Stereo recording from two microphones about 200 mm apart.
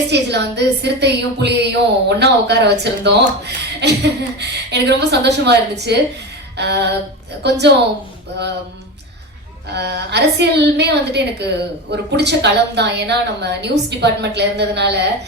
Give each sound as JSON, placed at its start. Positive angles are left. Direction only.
{"t": 0.1, "sound": "a woman's voice", "side_deg": -55}
{"t": 9.7, "sound": "a woman's voice", "side_deg": -55}